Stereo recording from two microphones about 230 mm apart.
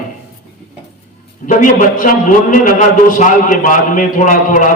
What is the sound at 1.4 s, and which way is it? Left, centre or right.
A man's voice, left.